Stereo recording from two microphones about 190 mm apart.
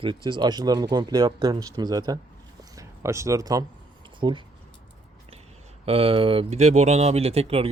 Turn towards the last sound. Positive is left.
turn(degrees=-30)  # may be behind; listen again after turning